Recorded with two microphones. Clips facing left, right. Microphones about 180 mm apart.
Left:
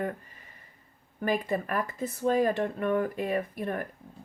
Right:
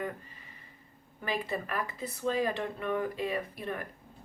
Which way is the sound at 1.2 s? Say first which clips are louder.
Left 6 dB; 50° left (ahead or behind).